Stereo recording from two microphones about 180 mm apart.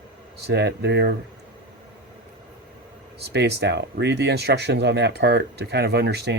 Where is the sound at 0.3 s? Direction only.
65° right (ahead or behind).